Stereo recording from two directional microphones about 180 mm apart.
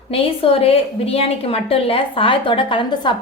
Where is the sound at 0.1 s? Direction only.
30° left (ahead or behind).